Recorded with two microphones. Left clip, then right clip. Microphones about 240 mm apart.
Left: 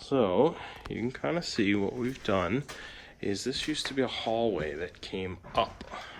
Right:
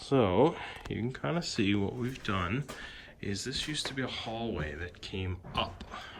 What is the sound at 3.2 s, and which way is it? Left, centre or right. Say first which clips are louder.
Speech: left 4 dB; centre.